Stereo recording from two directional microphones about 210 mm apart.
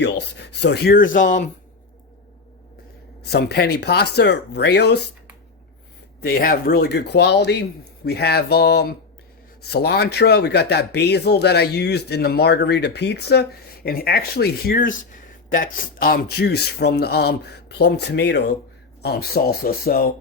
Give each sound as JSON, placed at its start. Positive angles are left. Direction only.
{"t": 0.0, "sound": "speech", "side_deg": 55}
{"t": 3.2, "sound": "speech", "side_deg": 50}
{"t": 6.2, "sound": "speech", "side_deg": 45}